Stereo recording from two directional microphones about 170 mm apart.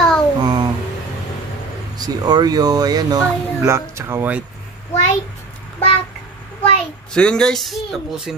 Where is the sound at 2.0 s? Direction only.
25° right (ahead or behind).